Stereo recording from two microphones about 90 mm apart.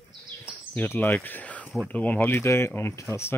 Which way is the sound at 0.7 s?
25° left (ahead or behind).